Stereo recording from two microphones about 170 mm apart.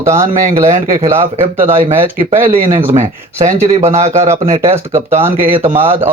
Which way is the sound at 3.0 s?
45° right (ahead or behind).